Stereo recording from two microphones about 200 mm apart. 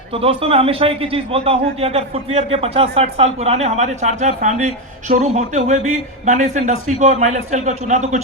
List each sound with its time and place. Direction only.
0.1 s a man's voice: 30° right (ahead or behind)